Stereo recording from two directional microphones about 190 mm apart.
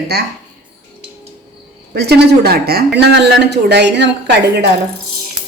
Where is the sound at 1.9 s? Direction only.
60° right (ahead or behind).